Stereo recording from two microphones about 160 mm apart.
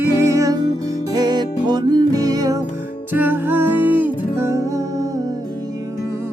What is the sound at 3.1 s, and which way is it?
Music, 10° right (ahead or behind).